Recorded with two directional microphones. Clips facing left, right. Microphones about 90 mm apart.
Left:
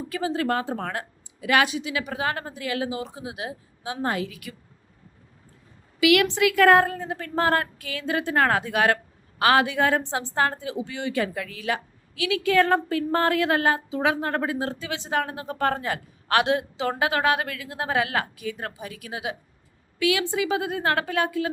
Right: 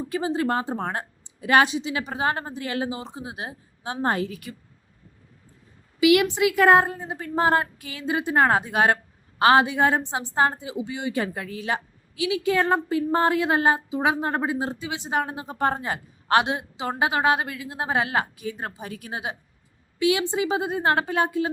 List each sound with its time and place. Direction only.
0.1 s a woman's voice: 25° right (ahead or behind)
6.0 s a woman's voice: 25° right (ahead or behind)